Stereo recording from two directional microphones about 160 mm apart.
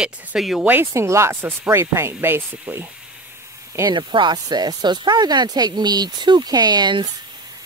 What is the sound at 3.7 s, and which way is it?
Speech, 25° right (ahead or behind).